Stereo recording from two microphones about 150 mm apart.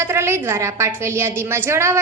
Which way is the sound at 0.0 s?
15° right (ahead or behind).